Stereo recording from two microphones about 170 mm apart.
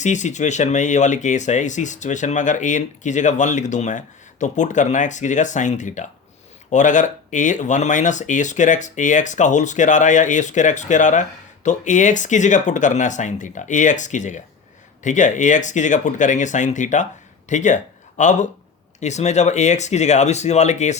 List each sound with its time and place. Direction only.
0.0 s speech: 45° left (ahead or behind)